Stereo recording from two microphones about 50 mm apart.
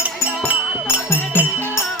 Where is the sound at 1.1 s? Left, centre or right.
Left.